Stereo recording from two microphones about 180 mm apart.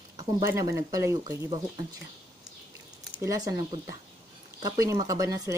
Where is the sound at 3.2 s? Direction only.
20° right (ahead or behind).